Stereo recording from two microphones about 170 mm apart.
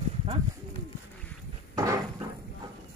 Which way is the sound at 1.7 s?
20° right (ahead or behind).